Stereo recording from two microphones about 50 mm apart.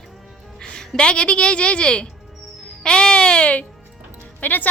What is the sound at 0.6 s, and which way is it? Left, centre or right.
A woman's voice, centre.